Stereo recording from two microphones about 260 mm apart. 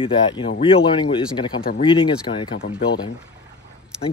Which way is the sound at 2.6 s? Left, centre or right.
Left.